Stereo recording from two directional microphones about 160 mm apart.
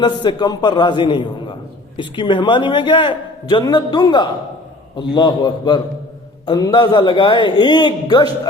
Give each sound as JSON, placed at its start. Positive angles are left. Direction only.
{"t": 0.0, "sound": "a man's voice", "side_deg": 30}